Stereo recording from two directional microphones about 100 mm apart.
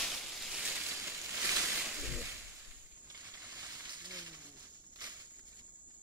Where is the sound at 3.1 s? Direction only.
30° right (ahead or behind).